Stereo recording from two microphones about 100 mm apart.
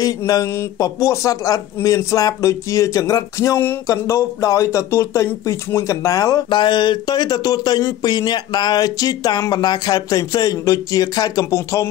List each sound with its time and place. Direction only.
0.0 s speech: 40° left (ahead or behind)
6.5 s speech: 50° left (ahead or behind); by 11.9 s 30° left (ahead or behind)